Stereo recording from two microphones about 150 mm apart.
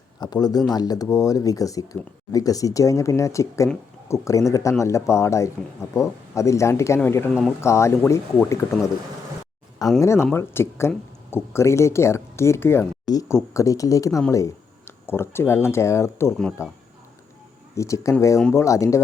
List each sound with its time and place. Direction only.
0.2 s speech: 25° left (ahead or behind)
10.0 s speech: 20° left (ahead or behind)
17.7 s speech: 20° left (ahead or behind)